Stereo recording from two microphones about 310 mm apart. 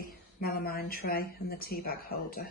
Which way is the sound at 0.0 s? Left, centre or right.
Left.